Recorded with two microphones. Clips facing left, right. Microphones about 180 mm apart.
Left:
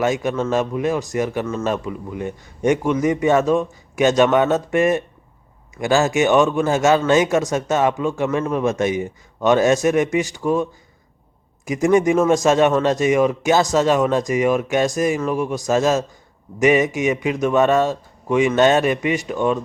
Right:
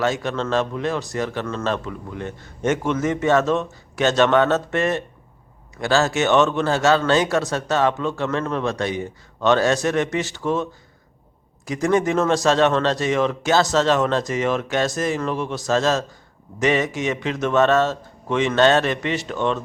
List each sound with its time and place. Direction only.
0.0 s a man's voice: 15° left (ahead or behind)